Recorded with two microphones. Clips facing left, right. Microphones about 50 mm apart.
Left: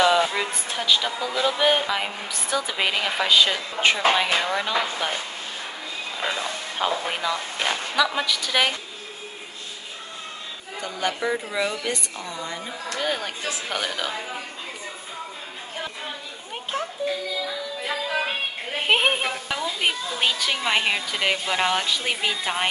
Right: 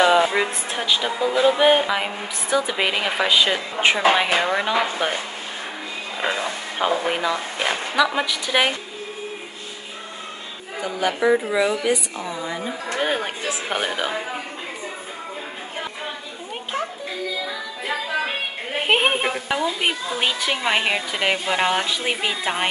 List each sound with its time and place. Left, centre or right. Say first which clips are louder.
0.0 s speech: right 3 dB; centre
6.2 s speech: right 4 dB; right
6.8 s a woman's voice: right 4 dB; centre
10.8 s a woman's voice: right 5 dB; centre
12.8 s speech: right 3 dB; right
18.8 s a woman's voice: right 2 dB; centre